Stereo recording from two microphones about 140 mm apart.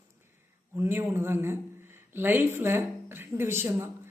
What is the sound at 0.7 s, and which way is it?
Speech, 15° right (ahead or behind).